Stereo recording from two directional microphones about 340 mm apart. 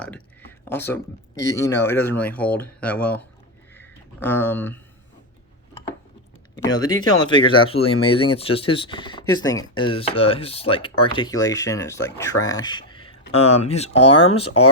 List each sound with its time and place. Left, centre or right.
0.0 s speech: centre
3.8 s a sound: centre
6.6 s speech: centre